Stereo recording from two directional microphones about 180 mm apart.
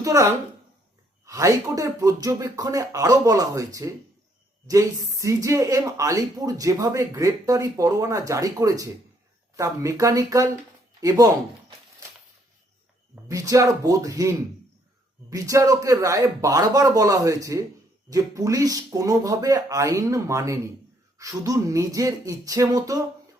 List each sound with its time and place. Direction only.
0.0 s a woman's voice: 15° right (ahead or behind)
13.2 s speech: 20° right (ahead or behind)